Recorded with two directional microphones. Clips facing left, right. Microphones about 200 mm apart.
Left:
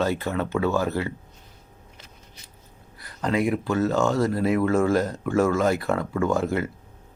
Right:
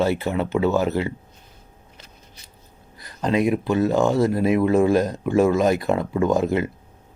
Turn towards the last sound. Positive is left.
turn(degrees=-20)  # may be behind; listen again after turning